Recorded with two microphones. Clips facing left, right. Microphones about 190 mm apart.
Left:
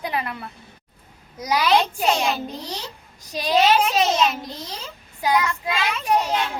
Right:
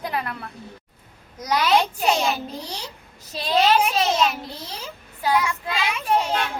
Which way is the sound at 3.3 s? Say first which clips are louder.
Left 3 dB; 15° left (ahead or behind).